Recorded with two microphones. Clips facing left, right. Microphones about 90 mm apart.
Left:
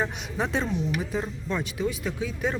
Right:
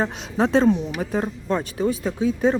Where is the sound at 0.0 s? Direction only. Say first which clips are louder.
Right 6 dB; 35° right (ahead or behind).